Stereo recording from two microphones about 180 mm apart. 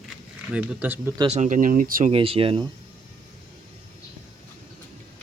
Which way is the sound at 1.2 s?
40° right (ahead or behind).